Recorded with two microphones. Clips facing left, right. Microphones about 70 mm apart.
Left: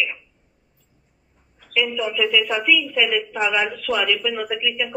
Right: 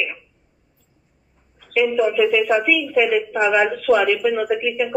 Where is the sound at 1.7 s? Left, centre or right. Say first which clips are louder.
Right 6 dB; right.